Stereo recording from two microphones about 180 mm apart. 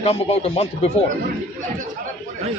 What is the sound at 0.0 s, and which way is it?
Speech, 35° left (ahead or behind).